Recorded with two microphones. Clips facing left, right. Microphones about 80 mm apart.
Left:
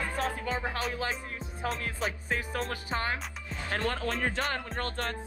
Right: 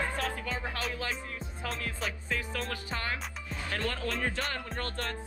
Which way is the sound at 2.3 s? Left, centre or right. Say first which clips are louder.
Left 2 dB; left.